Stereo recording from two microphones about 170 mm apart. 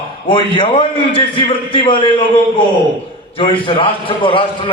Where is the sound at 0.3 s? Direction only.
30° left (ahead or behind).